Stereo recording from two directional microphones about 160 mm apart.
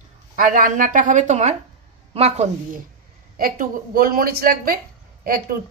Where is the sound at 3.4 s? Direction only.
65° right (ahead or behind).